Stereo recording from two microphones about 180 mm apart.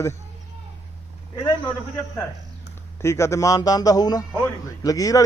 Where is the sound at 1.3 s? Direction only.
20° left (ahead or behind).